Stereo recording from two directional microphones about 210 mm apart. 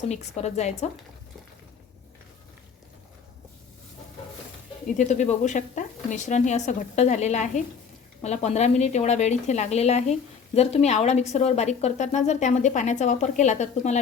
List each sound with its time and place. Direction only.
0.1 s a woman's voice: 30° left (ahead or behind)
4.9 s a woman's voice: 35° left (ahead or behind)